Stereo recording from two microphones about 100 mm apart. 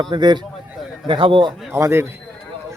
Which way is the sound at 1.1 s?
60° right (ahead or behind).